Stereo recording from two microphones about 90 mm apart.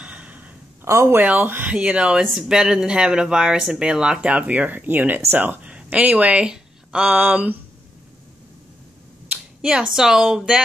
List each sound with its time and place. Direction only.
0.0 s gasp: 15° right (ahead or behind)
0.8 s speech: 30° right (ahead or behind)
1.2 s speech: 15° right (ahead or behind)
9.3 s speech: 10° right (ahead or behind)